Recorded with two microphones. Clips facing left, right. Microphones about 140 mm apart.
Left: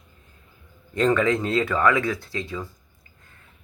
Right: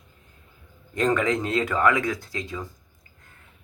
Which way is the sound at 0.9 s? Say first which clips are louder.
Left 2 dB; 20° right (ahead or behind).